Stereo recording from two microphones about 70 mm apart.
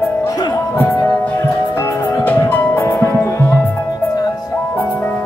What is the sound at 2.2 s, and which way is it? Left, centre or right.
Music, left.